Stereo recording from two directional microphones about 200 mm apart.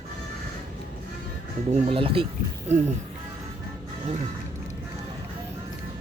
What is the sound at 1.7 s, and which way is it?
Speech, 30° right (ahead or behind).